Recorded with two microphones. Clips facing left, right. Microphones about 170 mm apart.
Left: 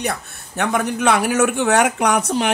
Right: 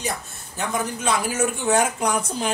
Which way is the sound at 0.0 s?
65° left (ahead or behind).